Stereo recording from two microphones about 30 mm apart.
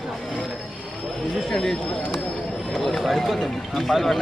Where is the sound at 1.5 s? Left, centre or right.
Centre.